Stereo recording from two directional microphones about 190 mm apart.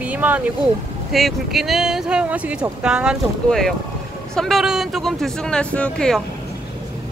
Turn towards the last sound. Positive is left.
turn(degrees=5)  # may be behind; listen again after turning